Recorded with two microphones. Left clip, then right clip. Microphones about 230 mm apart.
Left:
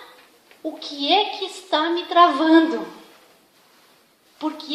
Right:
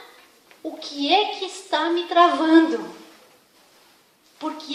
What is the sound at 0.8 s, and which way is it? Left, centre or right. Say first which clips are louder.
A woman's voice: even; left.